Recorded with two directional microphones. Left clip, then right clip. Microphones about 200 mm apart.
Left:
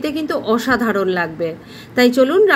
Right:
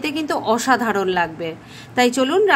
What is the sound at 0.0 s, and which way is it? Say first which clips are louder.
A woman's voice: left 1 dB; 10° right (ahead or behind).